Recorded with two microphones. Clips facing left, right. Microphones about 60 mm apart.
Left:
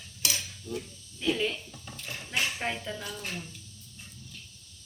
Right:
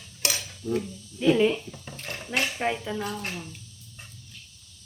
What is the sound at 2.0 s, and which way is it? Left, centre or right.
Cutlery, right.